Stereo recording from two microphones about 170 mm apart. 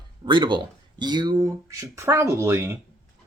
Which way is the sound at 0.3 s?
25° right (ahead or behind).